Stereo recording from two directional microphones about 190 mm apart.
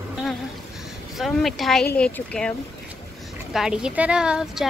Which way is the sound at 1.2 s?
Centre (ahead or behind).